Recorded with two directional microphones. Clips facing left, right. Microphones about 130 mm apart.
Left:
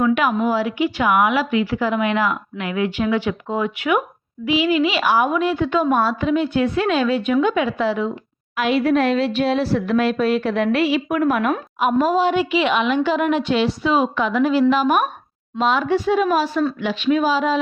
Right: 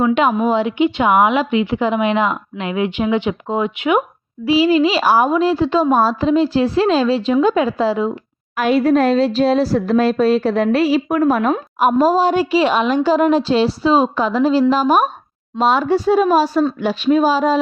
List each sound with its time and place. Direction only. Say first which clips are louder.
0.0 s a woman's voice: right 3 dB; 25° right (ahead or behind)
4.4 s speech: right 5 dB; 35° right (ahead or behind)